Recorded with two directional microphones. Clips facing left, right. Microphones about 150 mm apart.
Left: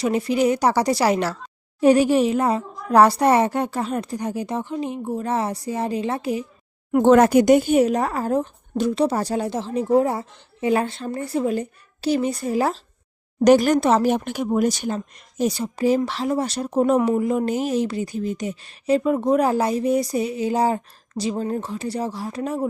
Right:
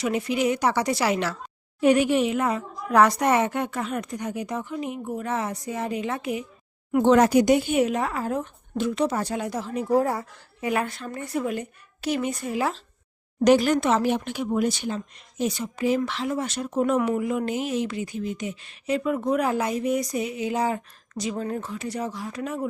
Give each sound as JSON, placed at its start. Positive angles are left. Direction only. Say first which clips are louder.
{"t": 0.0, "sound": "speech", "louder": "left 4 dB", "side_deg": 35}
{"t": 6.9, "sound": "speech", "louder": "left 4 dB", "side_deg": 50}